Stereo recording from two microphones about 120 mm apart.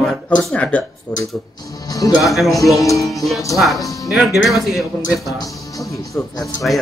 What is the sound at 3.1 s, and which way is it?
A woman's voice, centre (ahead or behind).